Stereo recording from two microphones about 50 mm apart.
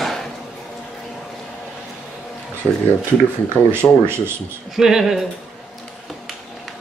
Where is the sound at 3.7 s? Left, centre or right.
Right.